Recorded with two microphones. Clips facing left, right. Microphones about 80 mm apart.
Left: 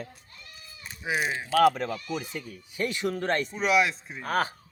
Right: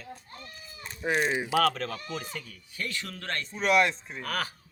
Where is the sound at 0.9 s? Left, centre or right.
Centre.